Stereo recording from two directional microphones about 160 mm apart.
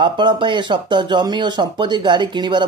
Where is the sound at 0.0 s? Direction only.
30° right (ahead or behind).